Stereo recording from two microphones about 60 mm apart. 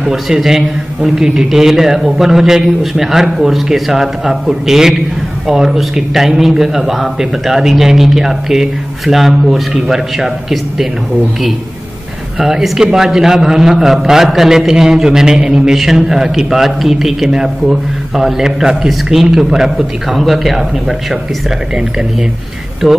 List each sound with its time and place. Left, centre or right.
0.1 s a man's voice: centre
12.4 s a man's voice: centre
22.8 s a man's voice: centre